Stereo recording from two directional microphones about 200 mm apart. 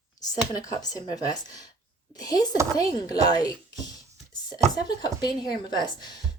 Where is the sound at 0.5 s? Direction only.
20° left (ahead or behind).